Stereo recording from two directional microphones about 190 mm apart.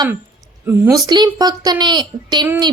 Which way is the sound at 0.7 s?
20° right (ahead or behind).